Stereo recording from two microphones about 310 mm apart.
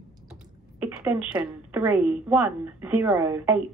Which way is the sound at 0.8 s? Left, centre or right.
Centre.